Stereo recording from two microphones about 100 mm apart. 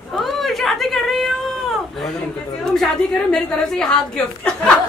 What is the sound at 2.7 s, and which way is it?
A woman's voice, 5° left (ahead or behind).